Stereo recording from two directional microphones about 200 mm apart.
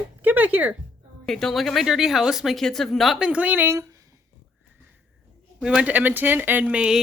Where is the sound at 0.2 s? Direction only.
5° right (ahead or behind).